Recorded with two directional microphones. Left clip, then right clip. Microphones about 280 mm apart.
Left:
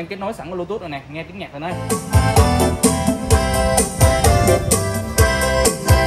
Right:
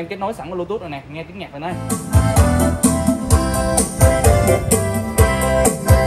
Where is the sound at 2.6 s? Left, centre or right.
Left.